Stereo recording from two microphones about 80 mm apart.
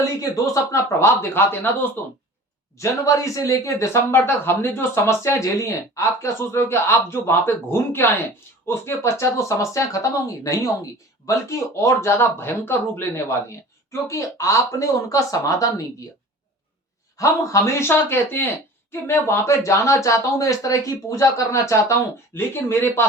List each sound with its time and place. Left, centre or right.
0.2 s speech: left
2.7 s speech: left
17.2 s speech: left